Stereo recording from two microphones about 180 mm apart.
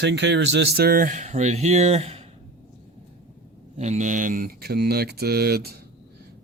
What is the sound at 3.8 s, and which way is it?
Speech, 40° right (ahead or behind).